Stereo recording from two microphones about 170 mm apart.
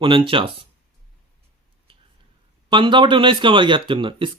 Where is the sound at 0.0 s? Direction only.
30° right (ahead or behind).